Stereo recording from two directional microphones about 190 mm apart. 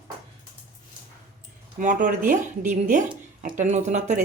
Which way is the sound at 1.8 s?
45° right (ahead or behind).